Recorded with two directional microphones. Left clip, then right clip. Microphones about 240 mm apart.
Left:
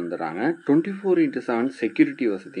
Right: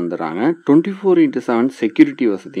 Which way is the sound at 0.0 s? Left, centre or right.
Right.